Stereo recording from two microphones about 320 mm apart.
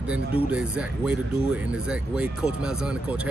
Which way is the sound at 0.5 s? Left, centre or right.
Centre.